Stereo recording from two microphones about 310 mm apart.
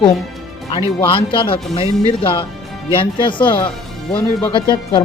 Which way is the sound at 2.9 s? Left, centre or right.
Centre.